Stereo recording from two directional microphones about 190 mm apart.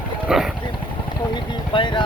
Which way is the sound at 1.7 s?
25° left (ahead or behind).